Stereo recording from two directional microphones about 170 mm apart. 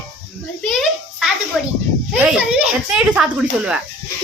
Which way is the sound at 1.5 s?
Centre (ahead or behind).